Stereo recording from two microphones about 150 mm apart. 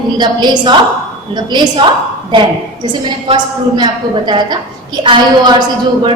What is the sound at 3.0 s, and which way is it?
A woman's voice, 30° right (ahead or behind).